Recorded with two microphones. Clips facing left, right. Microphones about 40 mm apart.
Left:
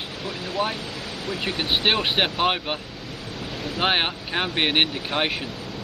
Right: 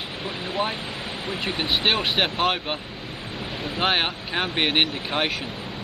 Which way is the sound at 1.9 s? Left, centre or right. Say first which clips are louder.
Left 1 dB; centre.